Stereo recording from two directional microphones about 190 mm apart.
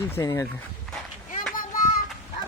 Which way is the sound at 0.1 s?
15° left (ahead or behind).